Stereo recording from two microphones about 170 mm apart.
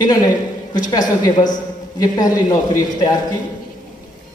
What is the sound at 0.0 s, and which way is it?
A man's voice, 25° left (ahead or behind).